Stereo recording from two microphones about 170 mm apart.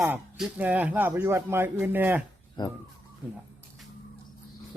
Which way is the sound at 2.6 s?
25° left (ahead or behind).